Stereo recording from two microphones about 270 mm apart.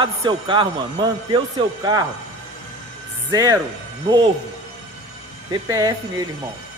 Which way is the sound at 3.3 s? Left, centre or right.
Centre.